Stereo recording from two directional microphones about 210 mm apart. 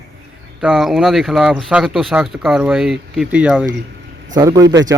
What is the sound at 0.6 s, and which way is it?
Speech, centre (ahead or behind).